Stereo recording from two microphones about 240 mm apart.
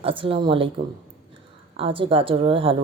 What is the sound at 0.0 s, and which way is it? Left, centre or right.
Speech, right.